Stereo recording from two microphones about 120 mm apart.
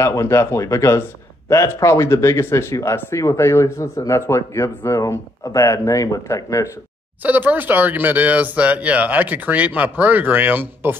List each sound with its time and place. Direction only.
0.0 s speech: 25° left (ahead or behind)
7.2 s speech: 15° right (ahead or behind)